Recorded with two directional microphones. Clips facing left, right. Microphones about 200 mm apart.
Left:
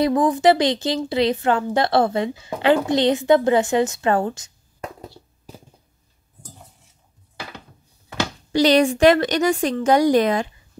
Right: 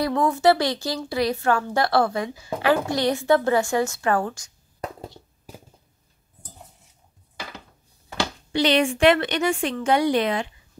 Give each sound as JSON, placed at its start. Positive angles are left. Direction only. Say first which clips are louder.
{"t": 0.0, "sound": "a woman's voice", "louder": "left 3 dB", "side_deg": 15}
{"t": 8.5, "sound": "a woman's voice", "louder": "left 4 dB", "side_deg": 40}